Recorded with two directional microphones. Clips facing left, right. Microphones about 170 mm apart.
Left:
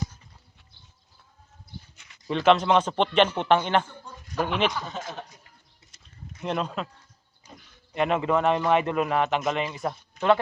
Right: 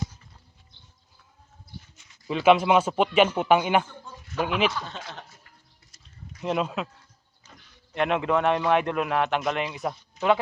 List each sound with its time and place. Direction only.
2.2 s a man's voice: 5° right (ahead or behind)
5.1 s speech: 15° left (ahead or behind)
6.4 s speech: 5° right (ahead or behind)
7.4 s speech: 5° left (ahead or behind)